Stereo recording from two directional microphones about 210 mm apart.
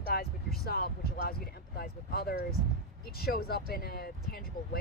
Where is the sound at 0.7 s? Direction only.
50° left (ahead or behind).